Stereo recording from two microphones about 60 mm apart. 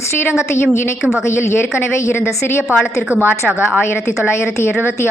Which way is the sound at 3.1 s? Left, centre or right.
Right.